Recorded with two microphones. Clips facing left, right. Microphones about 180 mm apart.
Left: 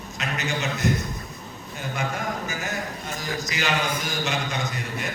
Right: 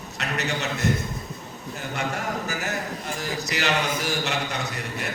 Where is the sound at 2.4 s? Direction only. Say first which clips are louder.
Right 1 dB; 70° right (ahead or behind).